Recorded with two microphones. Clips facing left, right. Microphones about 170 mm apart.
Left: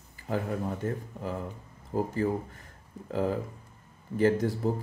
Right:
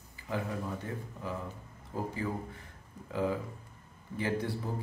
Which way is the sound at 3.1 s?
45° left (ahead or behind).